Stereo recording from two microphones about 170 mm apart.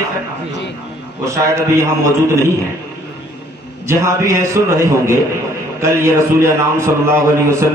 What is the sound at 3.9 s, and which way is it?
A man's voice, 15° right (ahead or behind).